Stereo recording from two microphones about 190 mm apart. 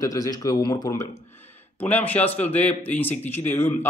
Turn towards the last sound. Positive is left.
turn(degrees=10)  # may be behind; listen again after turning